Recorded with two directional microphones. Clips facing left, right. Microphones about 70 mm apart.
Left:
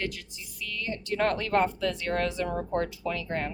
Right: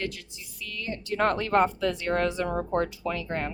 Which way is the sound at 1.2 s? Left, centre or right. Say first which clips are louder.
Right 2 dB; right.